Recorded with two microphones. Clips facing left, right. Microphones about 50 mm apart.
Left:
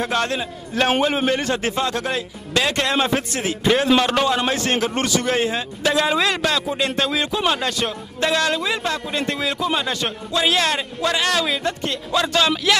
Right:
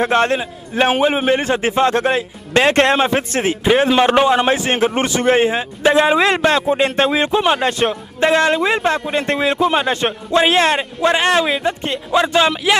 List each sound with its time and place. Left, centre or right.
0.0 s speech: right
0.4 s a man's voice: centre; by 3.0 s right
3.0 s a man's voice: right